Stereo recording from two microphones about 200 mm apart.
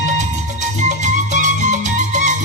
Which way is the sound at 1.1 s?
40° right (ahead or behind).